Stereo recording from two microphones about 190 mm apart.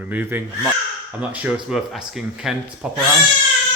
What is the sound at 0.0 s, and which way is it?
Speech, 10° right (ahead or behind).